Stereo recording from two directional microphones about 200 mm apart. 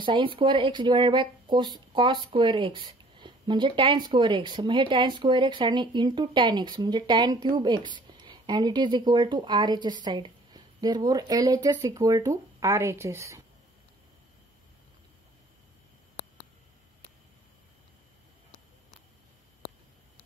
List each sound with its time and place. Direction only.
0.0 s speech: 25° right (ahead or behind)